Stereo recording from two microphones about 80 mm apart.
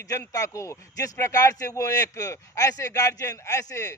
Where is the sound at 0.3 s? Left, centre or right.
Left.